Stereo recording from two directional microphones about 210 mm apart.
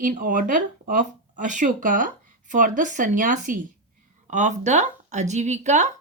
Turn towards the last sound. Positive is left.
turn(degrees=-35)  # may be behind; listen again after turning